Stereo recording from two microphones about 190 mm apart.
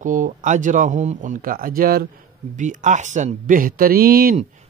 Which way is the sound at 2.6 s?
40° right (ahead or behind).